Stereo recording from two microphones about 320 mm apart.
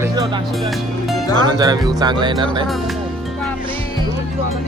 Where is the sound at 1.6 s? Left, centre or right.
Centre.